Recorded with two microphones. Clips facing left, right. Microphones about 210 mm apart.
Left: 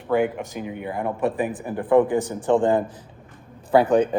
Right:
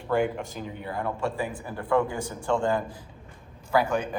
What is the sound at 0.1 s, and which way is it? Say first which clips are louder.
Speech: left 4 dB; 5° left (ahead or behind).